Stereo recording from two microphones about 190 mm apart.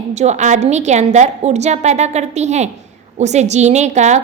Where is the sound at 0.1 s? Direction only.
35° right (ahead or behind).